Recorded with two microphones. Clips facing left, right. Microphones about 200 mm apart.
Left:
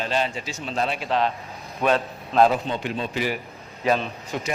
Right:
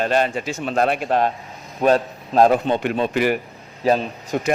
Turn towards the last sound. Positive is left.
turn(degrees=-50)  # may be behind; listen again after turning